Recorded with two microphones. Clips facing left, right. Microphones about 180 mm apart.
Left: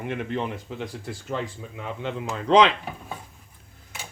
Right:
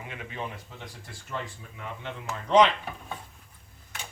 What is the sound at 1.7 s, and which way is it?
Speech, 90° left.